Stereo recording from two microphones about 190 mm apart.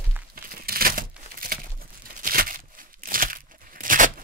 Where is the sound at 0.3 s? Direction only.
50° right (ahead or behind).